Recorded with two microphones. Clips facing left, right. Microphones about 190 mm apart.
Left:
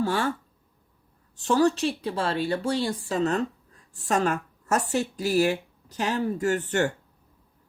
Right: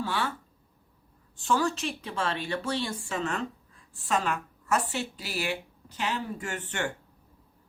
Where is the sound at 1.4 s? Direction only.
40° left (ahead or behind).